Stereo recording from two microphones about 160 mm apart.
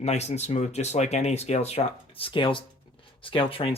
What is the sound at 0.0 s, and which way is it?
Speech, 45° left (ahead or behind).